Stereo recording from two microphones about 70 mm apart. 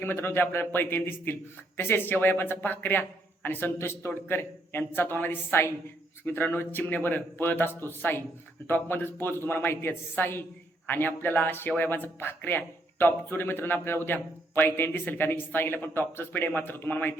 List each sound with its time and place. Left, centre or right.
0.0 s a man's voice: left